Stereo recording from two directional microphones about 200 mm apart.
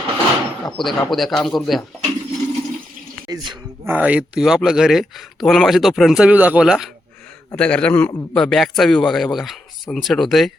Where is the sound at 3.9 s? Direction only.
5° right (ahead or behind).